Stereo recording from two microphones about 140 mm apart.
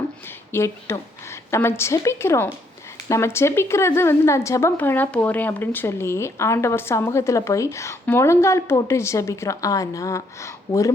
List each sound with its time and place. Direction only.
0.5 s a woman's voice: 20° left (ahead or behind)